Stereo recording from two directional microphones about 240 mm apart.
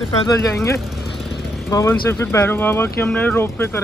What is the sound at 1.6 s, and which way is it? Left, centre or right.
Speech, centre.